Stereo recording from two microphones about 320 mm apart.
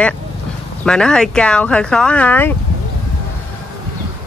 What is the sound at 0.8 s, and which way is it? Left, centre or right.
Speech, centre.